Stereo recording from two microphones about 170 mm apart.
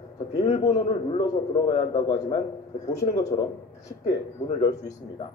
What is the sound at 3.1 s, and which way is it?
Speech, 40° left (ahead or behind).